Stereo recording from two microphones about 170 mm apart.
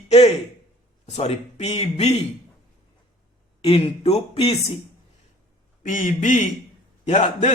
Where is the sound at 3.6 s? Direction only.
35° left (ahead or behind).